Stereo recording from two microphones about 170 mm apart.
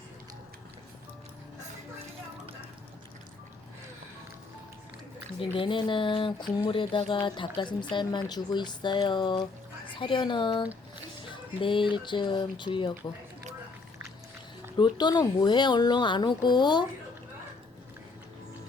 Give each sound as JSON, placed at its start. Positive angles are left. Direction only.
{"t": 5.5, "sound": "speech", "side_deg": 30}
{"t": 14.8, "sound": "speech", "side_deg": 25}